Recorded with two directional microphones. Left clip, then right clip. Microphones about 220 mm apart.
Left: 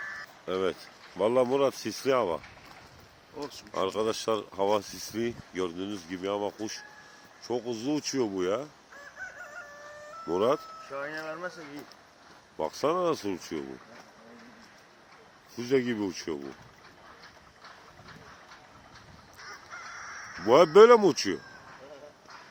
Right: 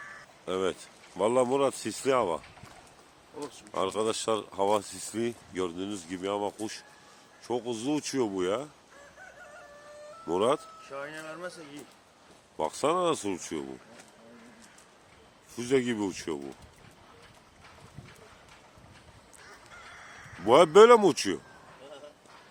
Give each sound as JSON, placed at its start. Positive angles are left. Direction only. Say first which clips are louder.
{"t": 0.4, "sound": "speech", "louder": "even", "side_deg": -5}
{"t": 3.7, "sound": "speech", "louder": "even", "side_deg": 0}
{"t": 10.2, "sound": "speech", "louder": "even", "side_deg": 0}
{"t": 10.9, "sound": "speech", "louder": "left 3 dB", "side_deg": 25}
{"t": 12.5, "sound": "speech", "louder": "right 1 dB", "side_deg": -5}
{"t": 15.5, "sound": "speech", "louder": "even", "side_deg": -5}
{"t": 20.4, "sound": "speech", "louder": "even", "side_deg": 0}